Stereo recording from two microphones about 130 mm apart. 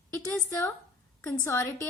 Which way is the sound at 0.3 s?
20° left (ahead or behind).